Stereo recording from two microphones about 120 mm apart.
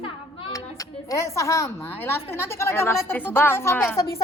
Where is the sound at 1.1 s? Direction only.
25° left (ahead or behind).